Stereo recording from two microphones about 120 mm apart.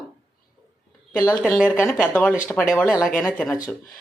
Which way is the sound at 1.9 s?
10° left (ahead or behind).